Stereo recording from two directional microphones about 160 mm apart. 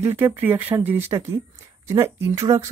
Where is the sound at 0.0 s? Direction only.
10° right (ahead or behind).